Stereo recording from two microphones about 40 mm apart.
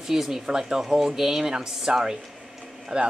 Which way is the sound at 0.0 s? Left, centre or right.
Centre.